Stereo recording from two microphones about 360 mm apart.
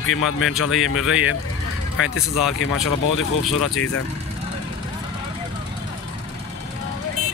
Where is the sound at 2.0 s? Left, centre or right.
Left.